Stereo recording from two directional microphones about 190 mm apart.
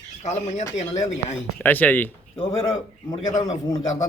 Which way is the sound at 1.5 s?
10° left (ahead or behind).